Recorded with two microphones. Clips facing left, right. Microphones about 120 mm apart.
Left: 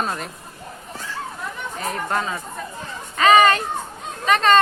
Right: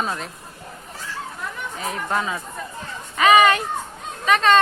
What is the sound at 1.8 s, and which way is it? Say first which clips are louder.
Speech: even; centre (ahead or behind).